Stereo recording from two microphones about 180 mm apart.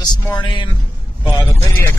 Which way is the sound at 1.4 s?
10° left (ahead or behind).